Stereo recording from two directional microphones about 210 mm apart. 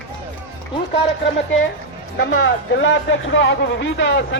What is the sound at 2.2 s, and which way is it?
Speech, 60° left (ahead or behind).